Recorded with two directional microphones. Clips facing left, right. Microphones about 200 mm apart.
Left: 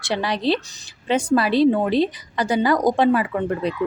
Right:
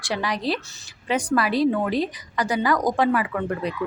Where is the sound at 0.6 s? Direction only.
15° left (ahead or behind).